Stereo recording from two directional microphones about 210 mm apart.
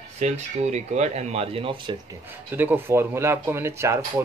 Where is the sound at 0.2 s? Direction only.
35° right (ahead or behind).